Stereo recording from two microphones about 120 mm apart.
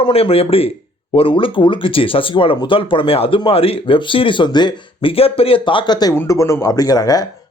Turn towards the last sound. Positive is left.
turn(degrees=30)  # may be behind; listen again after turning